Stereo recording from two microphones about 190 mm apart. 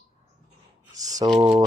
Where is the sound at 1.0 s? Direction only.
20° right (ahead or behind).